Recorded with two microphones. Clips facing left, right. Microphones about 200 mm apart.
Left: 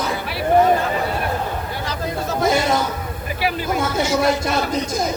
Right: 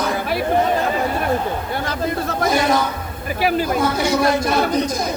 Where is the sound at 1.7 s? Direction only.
55° right (ahead or behind).